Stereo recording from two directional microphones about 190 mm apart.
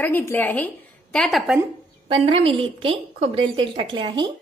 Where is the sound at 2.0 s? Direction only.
30° right (ahead or behind).